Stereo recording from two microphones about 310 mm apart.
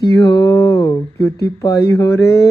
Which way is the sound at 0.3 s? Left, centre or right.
Centre.